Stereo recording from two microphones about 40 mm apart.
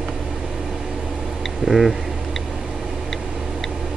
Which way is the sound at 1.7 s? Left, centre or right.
Centre.